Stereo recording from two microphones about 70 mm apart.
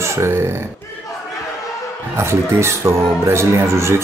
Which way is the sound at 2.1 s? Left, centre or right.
Right.